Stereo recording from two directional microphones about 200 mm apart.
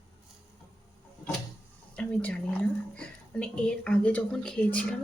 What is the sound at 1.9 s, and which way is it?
A woman's voice, 5° left (ahead or behind).